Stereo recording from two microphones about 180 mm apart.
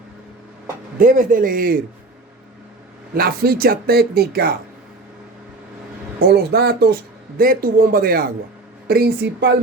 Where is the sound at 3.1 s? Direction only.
55° right (ahead or behind).